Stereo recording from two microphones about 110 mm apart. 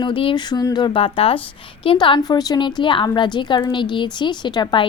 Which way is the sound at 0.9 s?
55° left (ahead or behind).